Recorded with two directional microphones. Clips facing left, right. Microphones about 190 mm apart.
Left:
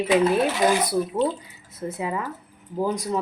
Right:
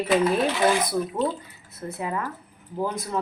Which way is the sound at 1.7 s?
20° left (ahead or behind).